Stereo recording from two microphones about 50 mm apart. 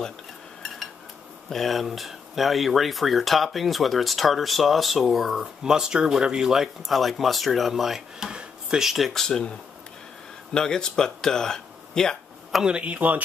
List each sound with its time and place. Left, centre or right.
1.5 s speech: centre
8.3 s speech: centre
10.5 s speech: centre
12.6 s speech: right